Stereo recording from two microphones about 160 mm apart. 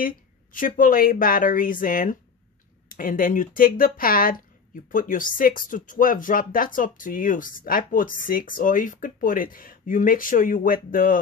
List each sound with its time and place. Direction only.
0.0 s speech: 60° left (ahead or behind)